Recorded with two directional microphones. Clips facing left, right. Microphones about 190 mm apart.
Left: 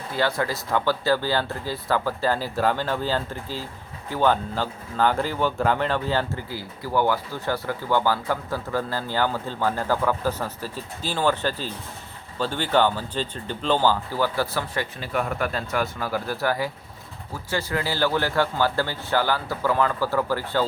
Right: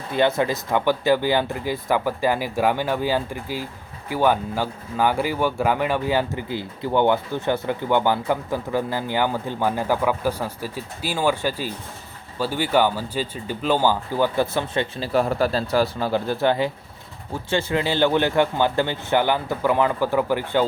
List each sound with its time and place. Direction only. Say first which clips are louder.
0.1 s speech: right 5 dB; 20° right (ahead or behind)